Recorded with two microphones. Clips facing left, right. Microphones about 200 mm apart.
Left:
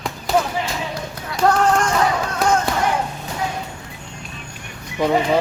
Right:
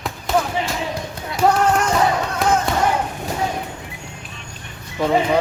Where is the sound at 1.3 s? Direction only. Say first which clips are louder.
Even; 5° right (ahead or behind).